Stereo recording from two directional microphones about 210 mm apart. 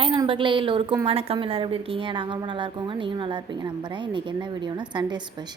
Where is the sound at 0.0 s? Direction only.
25° right (ahead or behind).